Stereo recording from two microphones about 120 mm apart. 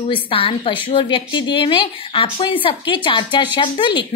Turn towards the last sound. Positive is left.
turn(degrees=40)  # may be behind; listen again after turning